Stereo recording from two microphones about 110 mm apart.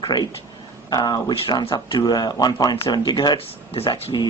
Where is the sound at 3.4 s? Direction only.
60° left (ahead or behind).